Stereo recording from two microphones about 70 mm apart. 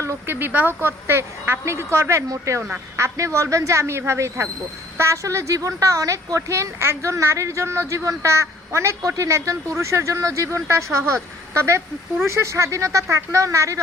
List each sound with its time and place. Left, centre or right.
0.0 s speech: right
0.3 s a woman's voice: right